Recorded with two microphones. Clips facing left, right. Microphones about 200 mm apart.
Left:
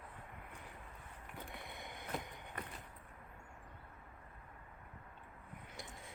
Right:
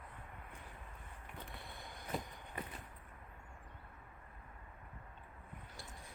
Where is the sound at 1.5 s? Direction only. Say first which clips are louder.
Left 2 dB; 20° left (ahead or behind).